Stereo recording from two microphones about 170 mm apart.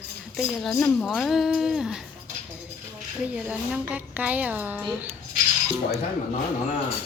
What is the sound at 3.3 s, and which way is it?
A woman's voice, 5° right (ahead or behind).